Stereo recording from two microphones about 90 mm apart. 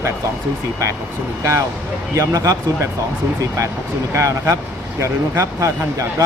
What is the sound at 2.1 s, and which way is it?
Speech, 35° right (ahead or behind).